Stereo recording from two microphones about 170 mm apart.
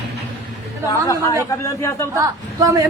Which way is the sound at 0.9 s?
20° left (ahead or behind).